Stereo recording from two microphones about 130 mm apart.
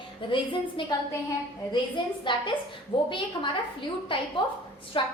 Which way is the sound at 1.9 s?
40° left (ahead or behind).